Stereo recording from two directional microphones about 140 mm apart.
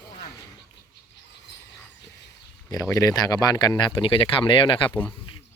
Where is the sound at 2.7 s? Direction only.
25° left (ahead or behind).